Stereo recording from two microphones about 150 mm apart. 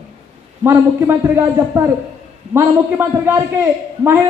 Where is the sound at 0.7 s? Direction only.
15° right (ahead or behind).